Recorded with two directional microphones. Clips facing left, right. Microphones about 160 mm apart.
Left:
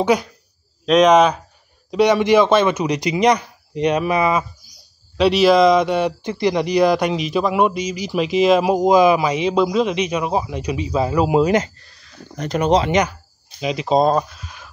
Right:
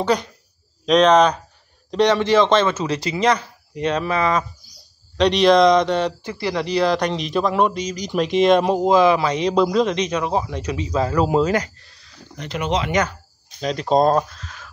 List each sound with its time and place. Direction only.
0.0 s speech: 10° left (ahead or behind)
12.4 s speech: 40° left (ahead or behind)
13.6 s speech: 5° left (ahead or behind)
14.4 s a sound: 15° left (ahead or behind)